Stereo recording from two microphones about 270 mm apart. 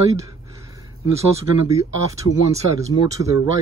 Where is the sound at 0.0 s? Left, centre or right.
Centre.